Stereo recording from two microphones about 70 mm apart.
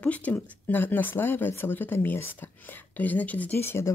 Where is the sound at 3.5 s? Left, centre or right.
Left.